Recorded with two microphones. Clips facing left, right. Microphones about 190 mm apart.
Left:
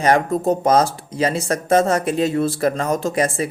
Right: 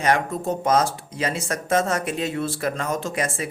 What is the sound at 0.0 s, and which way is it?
Speech, 35° left (ahead or behind).